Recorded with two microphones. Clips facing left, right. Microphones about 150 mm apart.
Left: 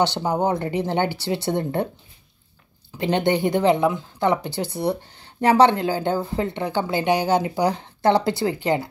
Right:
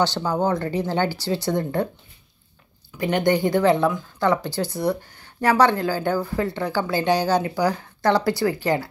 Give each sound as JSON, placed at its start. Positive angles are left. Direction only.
{"t": 0.0, "sound": "speech", "side_deg": 20}
{"t": 3.0, "sound": "speech", "side_deg": 25}